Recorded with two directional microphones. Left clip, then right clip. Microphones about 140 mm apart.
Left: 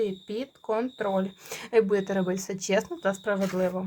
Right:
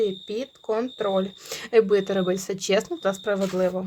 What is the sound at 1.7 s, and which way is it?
Speech, 45° right (ahead or behind).